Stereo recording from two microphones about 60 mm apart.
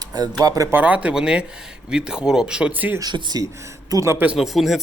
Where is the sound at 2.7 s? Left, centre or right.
Right.